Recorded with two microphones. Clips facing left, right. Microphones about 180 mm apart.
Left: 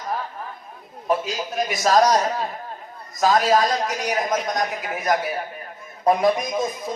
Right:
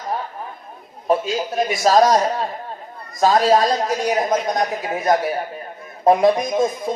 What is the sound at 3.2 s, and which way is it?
A man's voice, 30° right (ahead or behind).